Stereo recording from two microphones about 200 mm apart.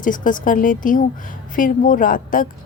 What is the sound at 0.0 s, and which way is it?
A woman's voice, 40° left (ahead or behind).